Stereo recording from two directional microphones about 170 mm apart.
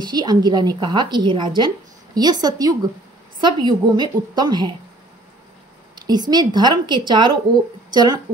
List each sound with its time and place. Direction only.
0.0 s a woman's voice: 25° right (ahead or behind)
5.9 s a woman's voice: 25° right (ahead or behind)